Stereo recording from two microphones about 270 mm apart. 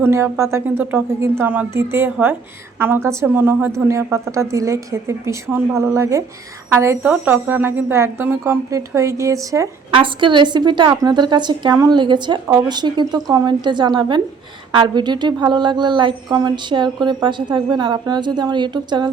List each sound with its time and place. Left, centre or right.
0.0 s a woman's voice: centre